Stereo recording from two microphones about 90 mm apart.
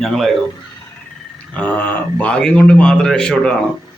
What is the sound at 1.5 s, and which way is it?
A man's voice, 15° left (ahead or behind).